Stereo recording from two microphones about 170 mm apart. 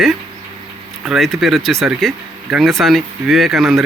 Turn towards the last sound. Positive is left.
turn(degrees=0)  # may be behind; listen again after turning